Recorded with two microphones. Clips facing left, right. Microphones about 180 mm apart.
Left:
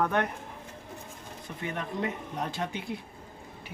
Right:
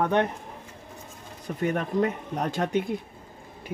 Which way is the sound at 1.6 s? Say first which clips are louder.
Right 8 dB; 45° right (ahead or behind).